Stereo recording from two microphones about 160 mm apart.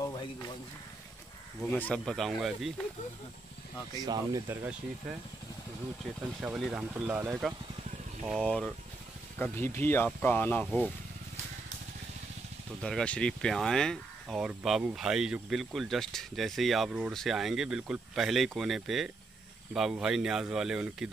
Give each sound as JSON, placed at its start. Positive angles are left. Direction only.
{"t": 0.0, "sound": "a sound", "side_deg": 25}
{"t": 1.6, "sound": "speech", "side_deg": 10}
{"t": 3.9, "sound": "speech", "side_deg": -25}
{"t": 6.4, "sound": "speech", "side_deg": -5}
{"t": 8.3, "sound": "speech", "side_deg": 5}
{"t": 9.4, "sound": "speech", "side_deg": 15}
{"t": 12.8, "sound": "speech", "side_deg": 5}